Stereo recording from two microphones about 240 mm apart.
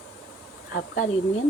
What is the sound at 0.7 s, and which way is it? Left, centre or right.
Speech, left.